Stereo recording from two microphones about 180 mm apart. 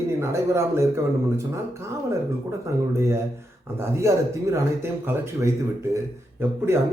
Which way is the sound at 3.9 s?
15° right (ahead or behind).